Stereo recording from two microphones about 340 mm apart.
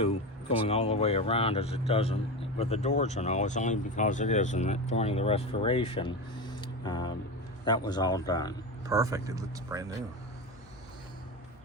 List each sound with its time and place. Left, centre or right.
0.7 s speech: centre
6.6 s a sound: centre
7.6 s speech: centre
8.9 s speech: centre